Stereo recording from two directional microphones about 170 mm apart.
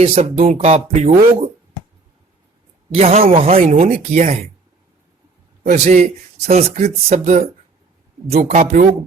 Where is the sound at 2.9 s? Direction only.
35° right (ahead or behind).